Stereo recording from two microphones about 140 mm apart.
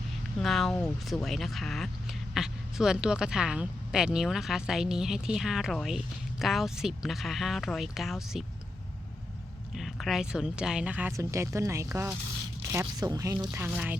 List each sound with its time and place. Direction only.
0.3 s speech: centre (ahead or behind)
9.7 s speech: centre (ahead or behind)
11.2 s speech: 20° right (ahead or behind)
13.7 s speech: 5° right (ahead or behind)